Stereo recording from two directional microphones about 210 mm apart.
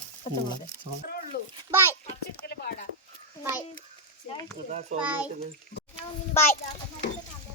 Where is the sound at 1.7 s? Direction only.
10° right (ahead or behind).